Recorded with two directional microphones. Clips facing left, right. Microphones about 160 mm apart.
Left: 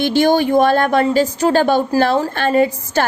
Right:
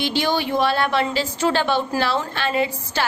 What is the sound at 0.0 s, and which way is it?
A woman's voice, 50° left (ahead or behind).